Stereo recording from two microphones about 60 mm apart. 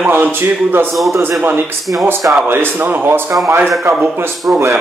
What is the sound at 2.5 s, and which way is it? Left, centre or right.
Speech, right.